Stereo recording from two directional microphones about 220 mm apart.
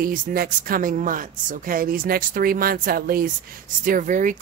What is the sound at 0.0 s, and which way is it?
A woman's voice, 40° right (ahead or behind).